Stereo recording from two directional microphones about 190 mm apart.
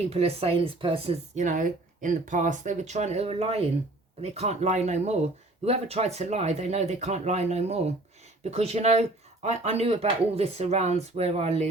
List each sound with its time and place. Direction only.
0.1 s speech: 30° right (ahead or behind)